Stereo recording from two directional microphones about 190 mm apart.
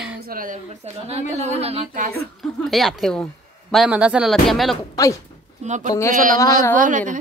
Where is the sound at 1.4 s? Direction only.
35° right (ahead or behind).